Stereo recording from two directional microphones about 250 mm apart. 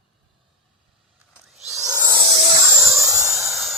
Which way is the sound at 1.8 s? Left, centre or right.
Centre.